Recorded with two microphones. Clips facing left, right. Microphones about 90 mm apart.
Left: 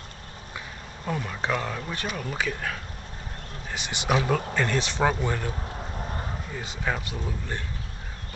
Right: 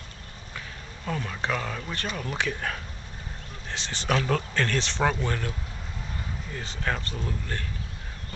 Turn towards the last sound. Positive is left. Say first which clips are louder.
# even
turn(degrees=15)  # may be behind; listen again after turning